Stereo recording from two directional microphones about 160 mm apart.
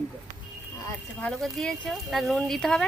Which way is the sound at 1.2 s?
5° left (ahead or behind).